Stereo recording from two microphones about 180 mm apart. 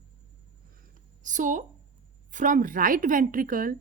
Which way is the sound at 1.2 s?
45° right (ahead or behind).